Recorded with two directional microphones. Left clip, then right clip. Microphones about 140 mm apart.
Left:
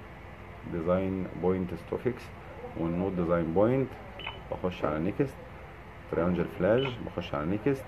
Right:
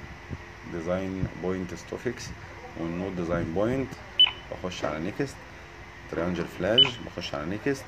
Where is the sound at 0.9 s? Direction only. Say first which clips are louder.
Left 2 dB; 15° left (ahead or behind).